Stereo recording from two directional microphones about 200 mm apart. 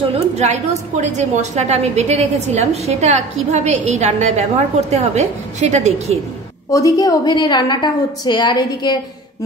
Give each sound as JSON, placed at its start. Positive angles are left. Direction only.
{"t": 0.1, "sound": "a woman's voice", "side_deg": -35}
{"t": 6.7, "sound": "a woman's voice", "side_deg": 15}